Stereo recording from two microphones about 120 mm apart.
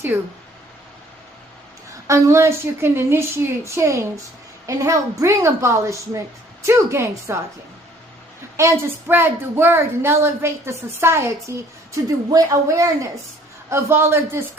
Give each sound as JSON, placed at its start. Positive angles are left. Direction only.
{"t": 0.1, "sound": "speech", "side_deg": -20}
{"t": 2.0, "sound": "speech", "side_deg": -25}
{"t": 8.5, "sound": "speech", "side_deg": -20}